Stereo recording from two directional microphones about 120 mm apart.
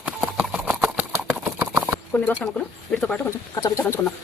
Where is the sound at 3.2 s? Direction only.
25° left (ahead or behind).